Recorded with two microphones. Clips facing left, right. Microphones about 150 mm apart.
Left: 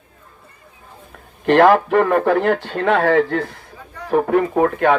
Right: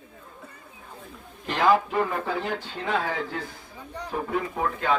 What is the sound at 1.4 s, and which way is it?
Speech, 65° left (ahead or behind).